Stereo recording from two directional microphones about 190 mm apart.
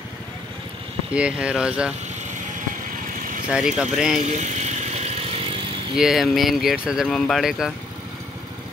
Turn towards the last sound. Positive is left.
turn(degrees=0)  # may be behind; listen again after turning